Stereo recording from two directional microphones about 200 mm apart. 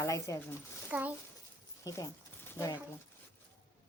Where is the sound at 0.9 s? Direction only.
5° right (ahead or behind).